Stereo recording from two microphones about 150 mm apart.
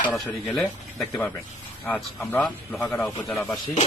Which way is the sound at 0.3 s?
5° left (ahead or behind).